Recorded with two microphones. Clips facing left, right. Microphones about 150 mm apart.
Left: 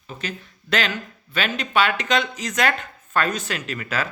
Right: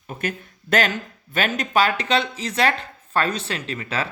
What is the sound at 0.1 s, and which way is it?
Speech, 50° right (ahead or behind).